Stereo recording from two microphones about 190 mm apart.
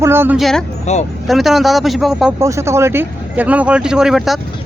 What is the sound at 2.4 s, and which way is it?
A man's voice, 15° right (ahead or behind).